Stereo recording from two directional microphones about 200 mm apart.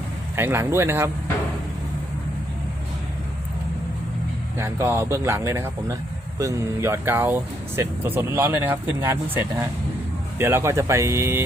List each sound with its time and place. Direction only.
0.3 s speech: 10° right (ahead or behind)
4.5 s speech: 10° right (ahead or behind)